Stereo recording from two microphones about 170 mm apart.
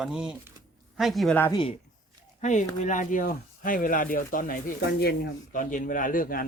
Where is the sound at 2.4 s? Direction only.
45° left (ahead or behind).